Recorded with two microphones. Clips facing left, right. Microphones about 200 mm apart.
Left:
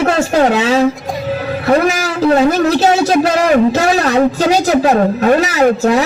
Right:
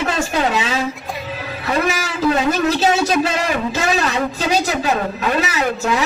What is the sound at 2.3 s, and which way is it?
A man's voice, 65° left (ahead or behind).